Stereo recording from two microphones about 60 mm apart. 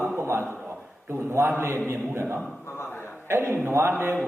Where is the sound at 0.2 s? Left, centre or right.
Right.